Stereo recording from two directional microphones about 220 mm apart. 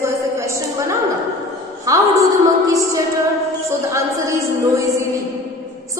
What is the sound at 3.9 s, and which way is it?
Speech, 15° right (ahead or behind).